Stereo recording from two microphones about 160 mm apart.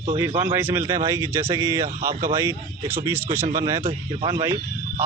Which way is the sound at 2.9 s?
15° right (ahead or behind).